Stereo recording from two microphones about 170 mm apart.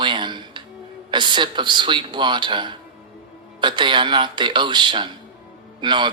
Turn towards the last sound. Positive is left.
turn(degrees=-25)  # may be behind; listen again after turning